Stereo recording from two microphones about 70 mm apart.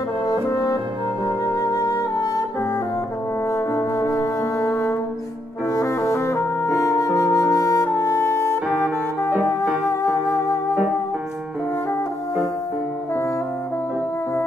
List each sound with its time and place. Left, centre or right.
1.4 s music: left
3.5 s music: left
5.8 s music: left